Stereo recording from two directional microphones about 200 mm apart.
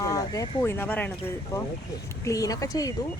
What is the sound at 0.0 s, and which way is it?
Speech, 20° left (ahead or behind).